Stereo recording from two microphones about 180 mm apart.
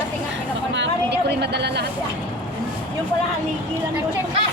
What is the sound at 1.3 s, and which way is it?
Speech, 70° right (ahead or behind).